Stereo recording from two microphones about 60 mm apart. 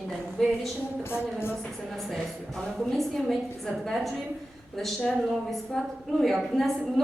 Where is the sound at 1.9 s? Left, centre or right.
Centre.